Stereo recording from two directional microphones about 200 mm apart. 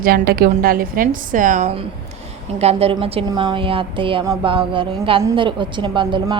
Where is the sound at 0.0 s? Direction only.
50° right (ahead or behind).